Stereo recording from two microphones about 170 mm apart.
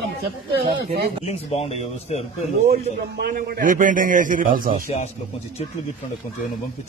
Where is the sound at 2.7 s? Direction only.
65° right (ahead or behind).